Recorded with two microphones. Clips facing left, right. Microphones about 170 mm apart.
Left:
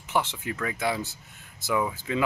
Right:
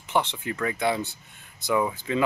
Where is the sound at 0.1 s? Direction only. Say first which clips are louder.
Right 2 dB; 5° left (ahead or behind).